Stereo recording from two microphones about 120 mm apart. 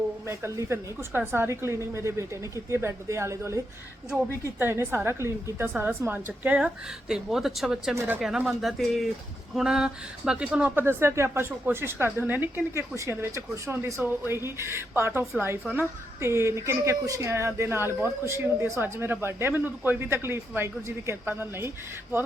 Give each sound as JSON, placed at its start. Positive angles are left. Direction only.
{"t": 0.3, "sound": "speech", "side_deg": -20}
{"t": 7.9, "sound": "speech", "side_deg": -15}
{"t": 8.2, "sound": "speech", "side_deg": -5}